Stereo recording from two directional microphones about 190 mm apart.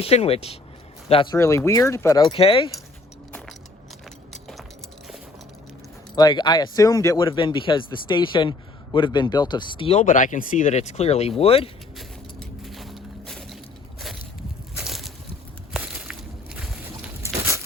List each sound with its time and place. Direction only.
0.0 s speech: 30° left (ahead or behind)
1.4 s speech: 15° left (ahead or behind)
4.3 s keys jangling: centre (ahead or behind)
6.1 s speech: 20° left (ahead or behind)
10.1 s speech: 45° left (ahead or behind)
11.9 s vehicle: centre (ahead or behind)
14.8 s a sound: centre (ahead or behind)
16.6 s boat: centre (ahead or behind)
17.2 s a sound: 15° right (ahead or behind)